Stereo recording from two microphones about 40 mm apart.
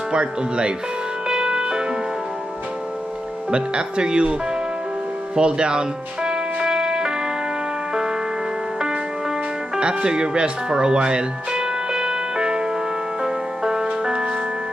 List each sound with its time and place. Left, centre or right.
0.1 s speech: right
1.3 s music: centre
3.5 s speech: right
5.3 s music: right
9.8 s music: right